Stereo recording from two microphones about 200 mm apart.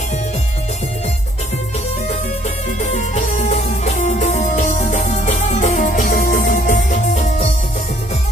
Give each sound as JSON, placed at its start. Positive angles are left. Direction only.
{"t": 2.8, "sound": "music", "side_deg": 35}